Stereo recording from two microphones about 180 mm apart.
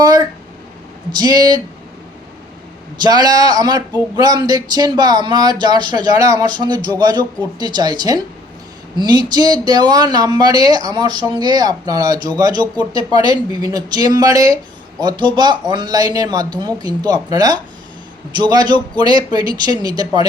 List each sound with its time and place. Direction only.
1.2 s speech: 20° right (ahead or behind)
3.0 s speech: 20° right (ahead or behind)